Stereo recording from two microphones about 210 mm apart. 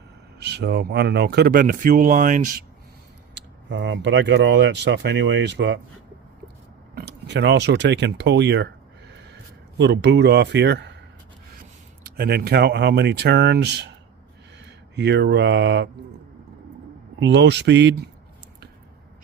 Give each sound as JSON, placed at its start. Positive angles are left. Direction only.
{"t": 0.3, "sound": "speech", "side_deg": -55}
{"t": 3.3, "sound": "speech", "side_deg": -60}
{"t": 6.9, "sound": "speech", "side_deg": -50}
{"t": 12.0, "sound": "speech", "side_deg": -45}
{"t": 17.2, "sound": "speech", "side_deg": -60}